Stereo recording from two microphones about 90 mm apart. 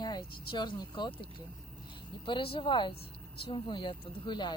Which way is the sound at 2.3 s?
80° left.